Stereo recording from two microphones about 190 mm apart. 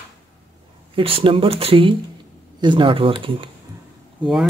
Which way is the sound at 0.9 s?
30° right (ahead or behind).